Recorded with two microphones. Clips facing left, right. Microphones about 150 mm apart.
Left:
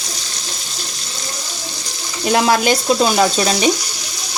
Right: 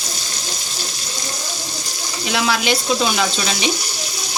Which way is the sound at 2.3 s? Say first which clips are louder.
Left 5 dB; 45° left (ahead or behind).